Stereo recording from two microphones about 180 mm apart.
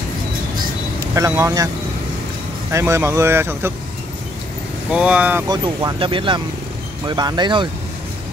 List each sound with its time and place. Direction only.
1.1 s speech: 15° right (ahead or behind)
2.7 s speech: 15° right (ahead or behind)
4.9 s speech: 5° right (ahead or behind)
5.5 s speech: 20° right (ahead or behind)